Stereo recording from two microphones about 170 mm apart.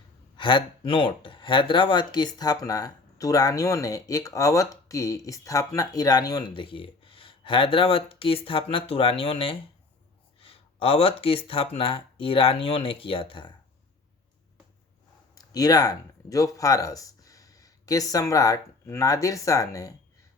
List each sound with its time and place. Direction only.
0.3 s speech: 30° left (ahead or behind)
10.4 s a sound: 35° left (ahead or behind)
11.4 s speech: 35° left (ahead or behind)
15.4 s speech: 20° left (ahead or behind)